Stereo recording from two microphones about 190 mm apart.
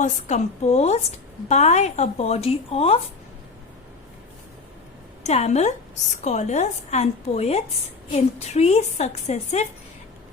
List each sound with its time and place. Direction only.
0.0 s a woman's voice: 40° left (ahead or behind)
5.2 s a woman's voice: 35° left (ahead or behind)